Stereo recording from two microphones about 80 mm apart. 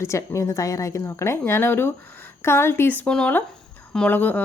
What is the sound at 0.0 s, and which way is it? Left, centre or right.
Speech, left.